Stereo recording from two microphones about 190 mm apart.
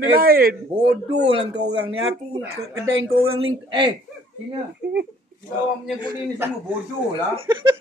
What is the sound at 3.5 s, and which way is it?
Speech, 30° right (ahead or behind).